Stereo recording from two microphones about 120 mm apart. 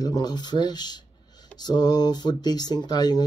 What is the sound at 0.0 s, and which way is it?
Speech, 35° left (ahead or behind).